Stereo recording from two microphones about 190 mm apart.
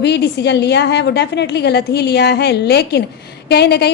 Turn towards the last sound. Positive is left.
turn(degrees=60)  # may be behind; listen again after turning